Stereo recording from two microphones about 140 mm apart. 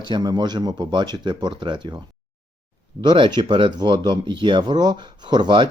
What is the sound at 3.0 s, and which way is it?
Speech, 35° right (ahead or behind).